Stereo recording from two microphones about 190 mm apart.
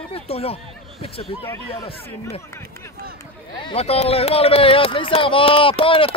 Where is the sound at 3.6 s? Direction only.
30° left (ahead or behind).